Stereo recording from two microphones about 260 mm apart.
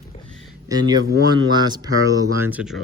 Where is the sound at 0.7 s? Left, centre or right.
Centre.